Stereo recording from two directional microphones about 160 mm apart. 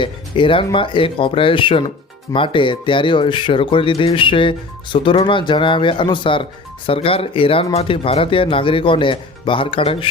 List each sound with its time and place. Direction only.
0.0 s speech: 30° left (ahead or behind)